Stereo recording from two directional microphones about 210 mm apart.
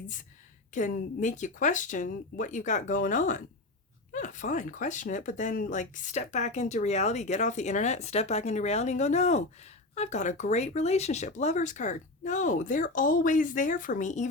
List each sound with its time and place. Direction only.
0.7 s speech: 35° left (ahead or behind)